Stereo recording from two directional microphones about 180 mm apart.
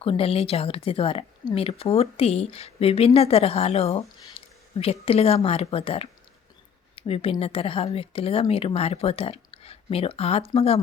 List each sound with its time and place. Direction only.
0.0 s speech: 30° left (ahead or behind)